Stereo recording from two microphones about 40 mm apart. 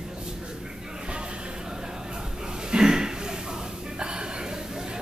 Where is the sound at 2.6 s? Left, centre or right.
Centre.